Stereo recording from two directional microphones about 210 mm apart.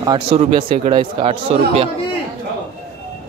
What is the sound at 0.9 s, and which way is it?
Speech, 25° right (ahead or behind).